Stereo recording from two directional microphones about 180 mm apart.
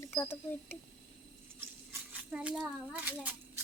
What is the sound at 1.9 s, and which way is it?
A child's voice, 10° right (ahead or behind).